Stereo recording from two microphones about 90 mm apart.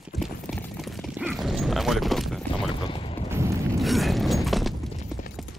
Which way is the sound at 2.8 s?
85° left.